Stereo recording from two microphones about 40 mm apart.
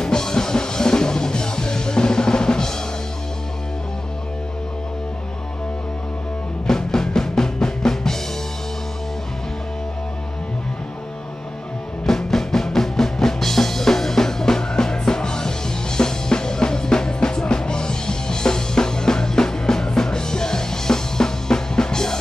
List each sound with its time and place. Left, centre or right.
0.0 s music: centre
6.7 s music: centre
12.1 s music: centre